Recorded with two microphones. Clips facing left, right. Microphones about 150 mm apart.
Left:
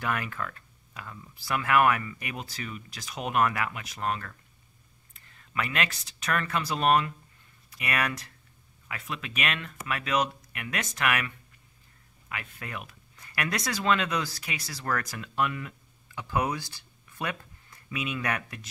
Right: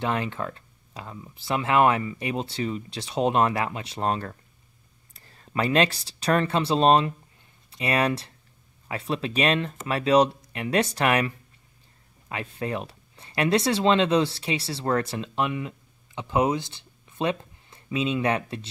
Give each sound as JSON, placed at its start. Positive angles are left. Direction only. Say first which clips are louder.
{"t": 0.0, "sound": "speech", "louder": "right 5 dB", "side_deg": -25}